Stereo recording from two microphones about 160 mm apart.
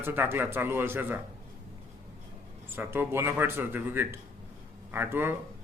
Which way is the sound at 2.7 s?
15° right (ahead or behind).